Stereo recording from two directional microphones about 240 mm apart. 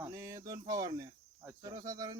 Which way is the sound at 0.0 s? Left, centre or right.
Centre.